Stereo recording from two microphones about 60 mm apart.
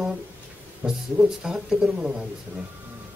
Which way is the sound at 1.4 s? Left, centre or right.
Centre.